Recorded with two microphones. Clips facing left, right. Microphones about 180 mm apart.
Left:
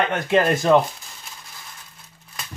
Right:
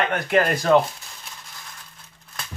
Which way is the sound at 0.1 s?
25° left (ahead or behind).